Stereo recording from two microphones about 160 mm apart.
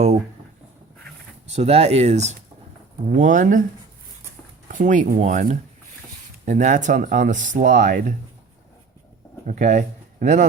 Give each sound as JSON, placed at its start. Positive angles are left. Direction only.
{"t": 1.5, "sound": "speech", "side_deg": -40}
{"t": 4.7, "sound": "speech", "side_deg": -55}
{"t": 9.5, "sound": "speech", "side_deg": -50}